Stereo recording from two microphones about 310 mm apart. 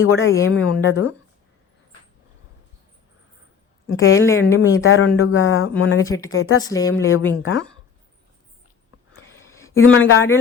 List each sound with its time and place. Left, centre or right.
0.0 s a man's voice: left
3.8 s a woman's voice: left
4.1 s speech: centre
4.8 s a man's voice: left
6.1 s speech: centre
6.3 s speech: left
6.6 s speech: centre
7.0 s a man's voice: left
9.5 s a sound: centre
9.7 s a man's voice: left